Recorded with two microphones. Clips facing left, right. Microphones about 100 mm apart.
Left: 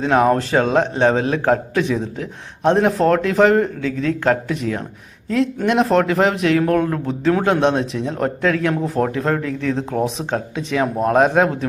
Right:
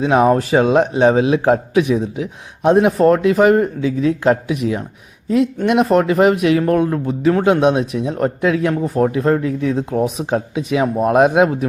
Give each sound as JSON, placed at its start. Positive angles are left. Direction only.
{"t": 0.0, "sound": "a man's voice", "side_deg": -10}
{"t": 9.4, "sound": "speech", "side_deg": 70}
{"t": 9.6, "sound": "a man's voice", "side_deg": -5}